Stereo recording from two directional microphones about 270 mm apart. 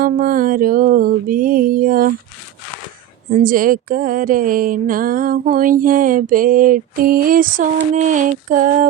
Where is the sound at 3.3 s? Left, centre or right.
Right.